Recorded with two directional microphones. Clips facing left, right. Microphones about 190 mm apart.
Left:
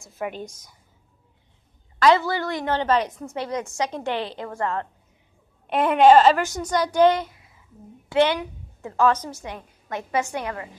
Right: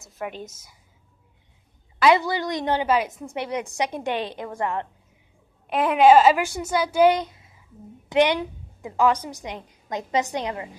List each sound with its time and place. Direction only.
0.1 s a woman's voice: centre (ahead or behind)
2.0 s a woman's voice: 15° right (ahead or behind)
5.7 s a woman's voice: centre (ahead or behind); by 10.7 s 20° right (ahead or behind)